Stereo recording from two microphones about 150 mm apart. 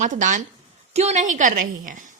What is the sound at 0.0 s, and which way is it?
A woman's voice, 55° right (ahead or behind).